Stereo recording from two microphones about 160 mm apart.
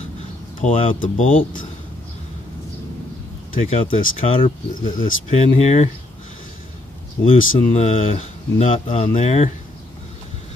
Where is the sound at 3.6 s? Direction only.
35° left (ahead or behind).